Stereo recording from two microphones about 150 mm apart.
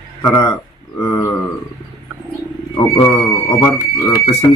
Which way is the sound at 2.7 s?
15° left (ahead or behind).